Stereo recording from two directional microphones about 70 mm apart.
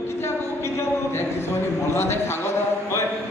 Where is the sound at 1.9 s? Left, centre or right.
Left.